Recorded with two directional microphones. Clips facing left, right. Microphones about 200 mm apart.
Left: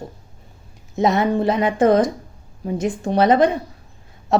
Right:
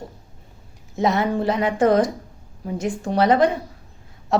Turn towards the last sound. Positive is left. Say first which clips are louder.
# left 2 dB
turn(degrees=20)  # may be behind; listen again after turning